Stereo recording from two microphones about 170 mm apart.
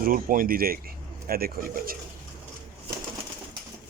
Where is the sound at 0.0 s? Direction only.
55° right (ahead or behind).